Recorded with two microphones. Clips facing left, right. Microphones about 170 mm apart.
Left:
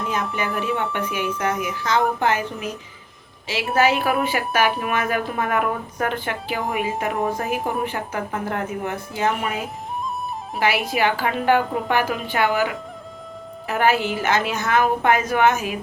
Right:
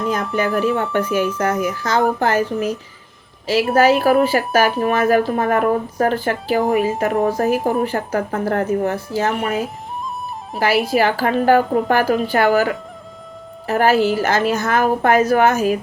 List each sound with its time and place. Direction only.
0.3 s a woman's voice: 40° right (ahead or behind)
10.6 s a woman's voice: 40° right (ahead or behind)